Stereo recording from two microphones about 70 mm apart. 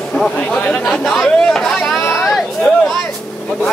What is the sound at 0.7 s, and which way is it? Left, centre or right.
Speech, centre.